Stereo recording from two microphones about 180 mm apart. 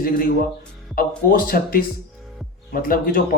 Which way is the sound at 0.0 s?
55° left (ahead or behind).